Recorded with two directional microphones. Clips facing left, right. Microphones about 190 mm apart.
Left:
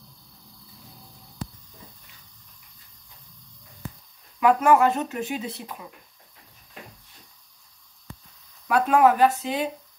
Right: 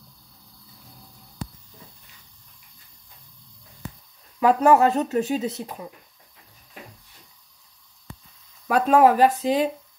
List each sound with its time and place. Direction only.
4.4 s speech: 35° right (ahead or behind)
8.6 s speech: 40° right (ahead or behind)